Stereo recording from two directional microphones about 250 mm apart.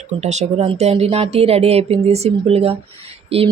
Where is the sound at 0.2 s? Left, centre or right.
Right.